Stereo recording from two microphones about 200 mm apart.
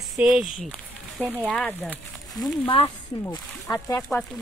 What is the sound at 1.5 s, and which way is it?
A woman's voice, 10° left (ahead or behind).